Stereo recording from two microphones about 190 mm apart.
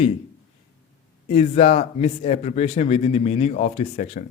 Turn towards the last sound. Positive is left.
turn(degrees=35)  # may be behind; listen again after turning